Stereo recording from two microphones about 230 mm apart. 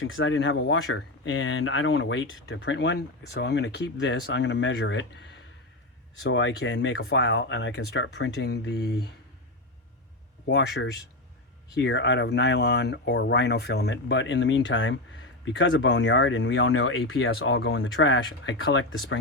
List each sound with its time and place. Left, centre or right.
0.0 s speech: left
10.4 s speech: left